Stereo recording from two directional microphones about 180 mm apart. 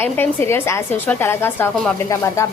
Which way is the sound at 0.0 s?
10° left (ahead or behind).